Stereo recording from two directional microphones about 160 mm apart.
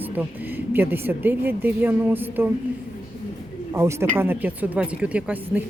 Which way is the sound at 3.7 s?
15° right (ahead or behind).